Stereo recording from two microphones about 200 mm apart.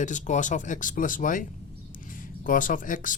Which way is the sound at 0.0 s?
40° left (ahead or behind).